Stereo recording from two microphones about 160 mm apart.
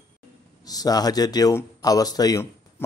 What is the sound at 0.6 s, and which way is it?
Speech, 25° left (ahead or behind).